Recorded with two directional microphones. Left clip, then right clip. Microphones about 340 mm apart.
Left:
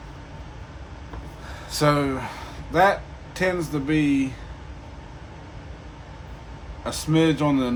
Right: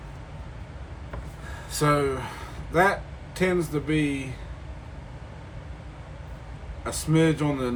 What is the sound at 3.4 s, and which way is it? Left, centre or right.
Speech, left.